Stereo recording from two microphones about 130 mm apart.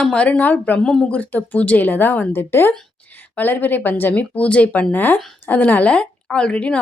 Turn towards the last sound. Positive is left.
turn(degrees=10)  # may be behind; listen again after turning